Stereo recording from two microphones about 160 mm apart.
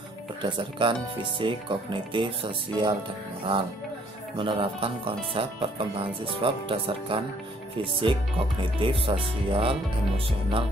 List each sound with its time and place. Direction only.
0.4 s speech: 30° right (ahead or behind)
4.4 s speech: 35° right (ahead or behind)